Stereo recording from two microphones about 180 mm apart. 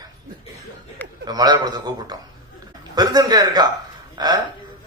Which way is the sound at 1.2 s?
20° right (ahead or behind).